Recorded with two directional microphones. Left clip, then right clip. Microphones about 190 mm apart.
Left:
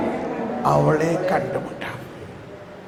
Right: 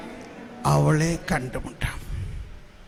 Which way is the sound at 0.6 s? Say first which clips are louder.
Left 4 dB; 35° right (ahead or behind).